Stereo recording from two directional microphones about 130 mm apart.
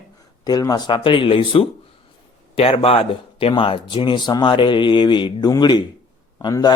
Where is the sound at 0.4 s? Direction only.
30° left (ahead or behind).